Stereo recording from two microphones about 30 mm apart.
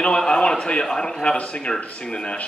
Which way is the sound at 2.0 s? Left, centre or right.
Left.